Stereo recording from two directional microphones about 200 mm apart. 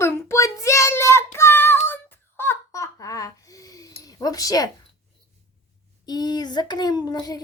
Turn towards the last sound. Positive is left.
turn(degrees=20)  # may be behind; listen again after turning